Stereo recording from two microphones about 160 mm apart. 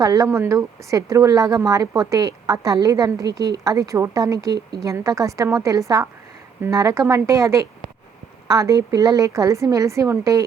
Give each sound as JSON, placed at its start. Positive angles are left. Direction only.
{"t": 0.0, "sound": "speech", "side_deg": -20}